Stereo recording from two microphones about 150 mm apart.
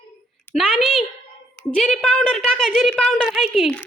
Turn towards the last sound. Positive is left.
turn(degrees=0)  # may be behind; listen again after turning